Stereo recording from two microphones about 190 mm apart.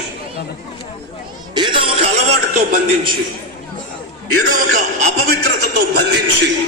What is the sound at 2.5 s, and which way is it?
Speech, 45° right (ahead or behind).